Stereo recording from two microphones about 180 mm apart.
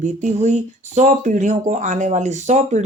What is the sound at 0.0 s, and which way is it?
Speech, 40° right (ahead or behind).